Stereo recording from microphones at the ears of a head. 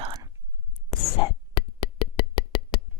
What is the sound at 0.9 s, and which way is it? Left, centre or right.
Whispering, left.